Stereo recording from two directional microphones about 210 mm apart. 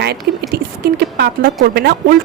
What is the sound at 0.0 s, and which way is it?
Speech, 50° right (ahead or behind).